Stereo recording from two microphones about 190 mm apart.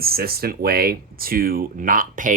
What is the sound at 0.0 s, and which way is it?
Speech, 55° right (ahead or behind).